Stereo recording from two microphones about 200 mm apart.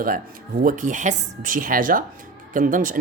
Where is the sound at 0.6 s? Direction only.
45° right (ahead or behind).